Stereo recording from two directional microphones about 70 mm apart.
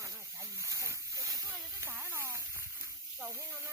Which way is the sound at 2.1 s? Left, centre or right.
Right.